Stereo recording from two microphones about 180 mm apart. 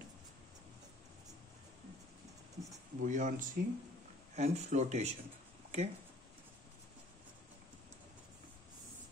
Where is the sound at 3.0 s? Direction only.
45° right (ahead or behind).